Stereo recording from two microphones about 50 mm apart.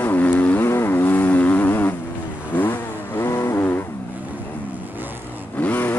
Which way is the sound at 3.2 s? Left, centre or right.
Left.